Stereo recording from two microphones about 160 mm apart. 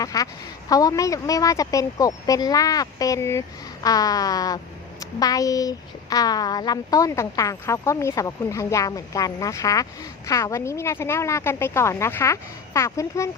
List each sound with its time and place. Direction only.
0.0 s a woman's voice: 20° left (ahead or behind)